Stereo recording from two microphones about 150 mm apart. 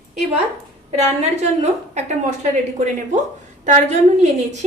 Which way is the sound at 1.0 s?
45° right (ahead or behind).